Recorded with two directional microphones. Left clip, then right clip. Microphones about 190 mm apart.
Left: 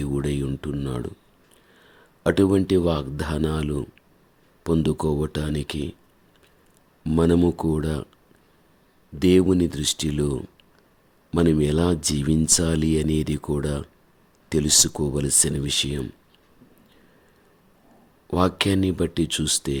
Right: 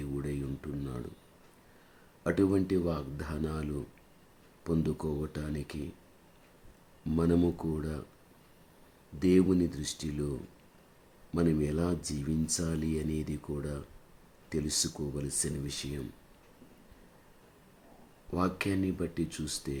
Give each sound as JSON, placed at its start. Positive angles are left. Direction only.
{"t": 0.0, "sound": "a sound", "side_deg": 50}
{"t": 2.2, "sound": "speech", "side_deg": 45}
{"t": 7.0, "sound": "speech", "side_deg": 40}
{"t": 9.1, "sound": "speech", "side_deg": 45}
{"t": 18.3, "sound": "speech", "side_deg": 50}